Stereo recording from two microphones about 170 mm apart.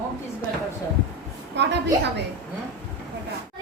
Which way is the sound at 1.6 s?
90° right.